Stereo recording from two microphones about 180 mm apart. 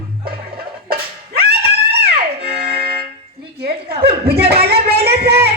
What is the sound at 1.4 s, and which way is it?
Music, 65° right (ahead or behind).